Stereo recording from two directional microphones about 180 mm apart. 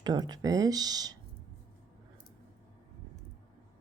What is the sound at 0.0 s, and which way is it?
A woman's voice, 25° right (ahead or behind).